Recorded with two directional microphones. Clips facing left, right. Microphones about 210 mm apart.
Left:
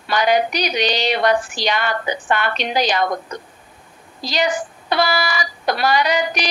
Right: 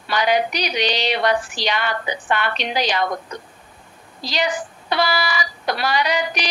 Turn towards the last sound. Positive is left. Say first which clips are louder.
# left 3 dB
turn(degrees=45)  # may be behind; listen again after turning